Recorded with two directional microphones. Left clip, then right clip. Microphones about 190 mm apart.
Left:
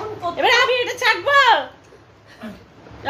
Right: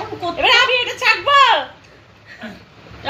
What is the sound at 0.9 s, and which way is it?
Speech, 20° left (ahead or behind).